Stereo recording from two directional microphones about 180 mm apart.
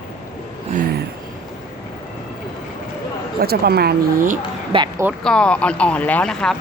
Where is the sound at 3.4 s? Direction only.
60° right (ahead or behind).